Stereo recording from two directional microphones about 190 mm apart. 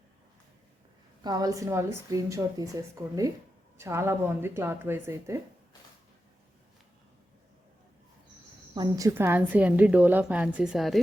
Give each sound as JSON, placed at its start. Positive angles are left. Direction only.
{"t": 1.2, "sound": "a woman's voice", "side_deg": -20}
{"t": 8.7, "sound": "a woman's voice", "side_deg": -20}